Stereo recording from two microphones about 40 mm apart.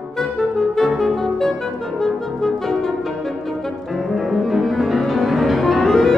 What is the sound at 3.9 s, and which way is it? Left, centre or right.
Music, centre.